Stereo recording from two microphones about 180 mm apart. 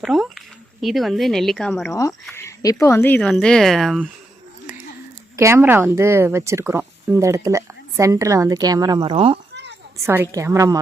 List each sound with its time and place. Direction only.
0.0 s speech: centre (ahead or behind)
1.9 s speech: 15° left (ahead or behind); by 4.0 s centre (ahead or behind)
5.4 s speech: 15° right (ahead or behind); by 9.4 s 30° right (ahead or behind)
10.1 s speech: 15° right (ahead or behind)